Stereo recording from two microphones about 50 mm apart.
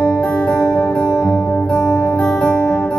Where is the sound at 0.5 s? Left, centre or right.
Left.